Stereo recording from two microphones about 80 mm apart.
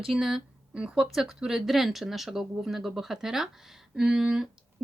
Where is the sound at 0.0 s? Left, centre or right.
Centre.